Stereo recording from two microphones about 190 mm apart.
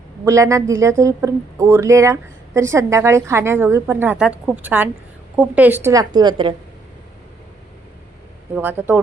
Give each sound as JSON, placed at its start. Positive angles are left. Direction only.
{"t": 0.3, "sound": "speech", "side_deg": -15}
{"t": 8.5, "sound": "speech", "side_deg": -10}